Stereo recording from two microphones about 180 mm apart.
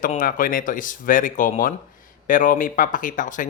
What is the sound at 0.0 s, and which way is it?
Speech, 50° left (ahead or behind).